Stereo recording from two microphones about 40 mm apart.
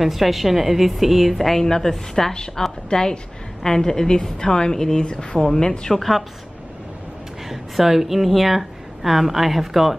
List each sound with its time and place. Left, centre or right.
0.0 s a woman's voice: centre
5.9 s speech: centre
7.4 s a woman's voice: centre